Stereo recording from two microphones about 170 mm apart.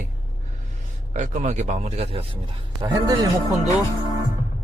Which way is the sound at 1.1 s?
45° right (ahead or behind).